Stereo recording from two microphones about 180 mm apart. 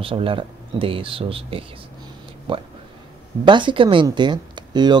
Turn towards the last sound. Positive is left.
turn(degrees=-25)  # may be behind; listen again after turning